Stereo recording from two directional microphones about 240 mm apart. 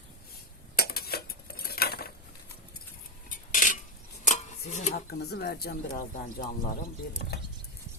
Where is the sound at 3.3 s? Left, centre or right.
Left.